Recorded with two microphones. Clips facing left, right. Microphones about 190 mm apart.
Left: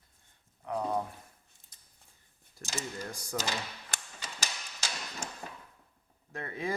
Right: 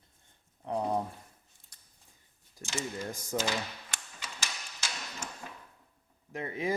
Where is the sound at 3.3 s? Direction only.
25° right (ahead or behind).